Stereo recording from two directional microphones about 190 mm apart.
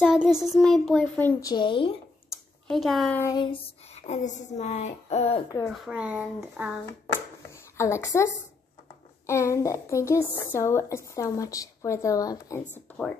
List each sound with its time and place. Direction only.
0.0 s a child's voice: 5° right (ahead or behind)
1.4 s speech: 25° left (ahead or behind)
2.7 s a child's voice: centre (ahead or behind)
3.2 s a sound: 20° left (ahead or behind)
5.7 s a child's voice: 5° right (ahead or behind)
7.7 s a woman's voice: 15° left (ahead or behind)